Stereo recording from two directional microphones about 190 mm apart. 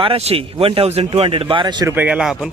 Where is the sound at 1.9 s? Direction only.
5° right (ahead or behind).